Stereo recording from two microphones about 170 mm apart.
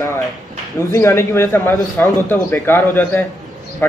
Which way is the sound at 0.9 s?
15° left (ahead or behind).